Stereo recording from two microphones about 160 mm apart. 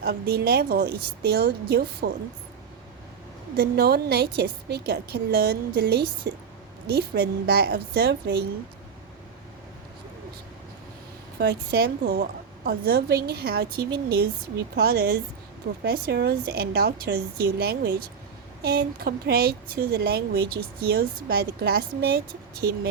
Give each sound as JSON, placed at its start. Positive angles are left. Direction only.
{"t": 0.0, "sound": "a woman's voice", "side_deg": -80}
{"t": 3.5, "sound": "a woman's voice", "side_deg": -80}
{"t": 11.3, "sound": "a woman's voice", "side_deg": -75}